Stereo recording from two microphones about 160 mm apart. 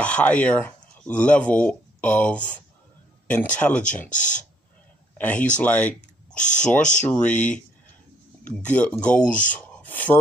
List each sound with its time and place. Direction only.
0.0 s a sound: 10° left (ahead or behind)
1.2 s speech: 10° left (ahead or behind)
4.1 s speech: 50° left (ahead or behind)
5.1 s speech: 10° left (ahead or behind)
5.9 s speech: 50° left (ahead or behind)
7.1 s speech: 10° left (ahead or behind)
8.6 s speech: 10° left (ahead or behind)
9.6 s a sound: 10° left (ahead or behind)